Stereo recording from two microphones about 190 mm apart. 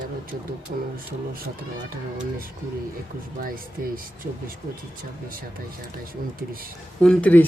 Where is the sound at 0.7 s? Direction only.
45° right (ahead or behind).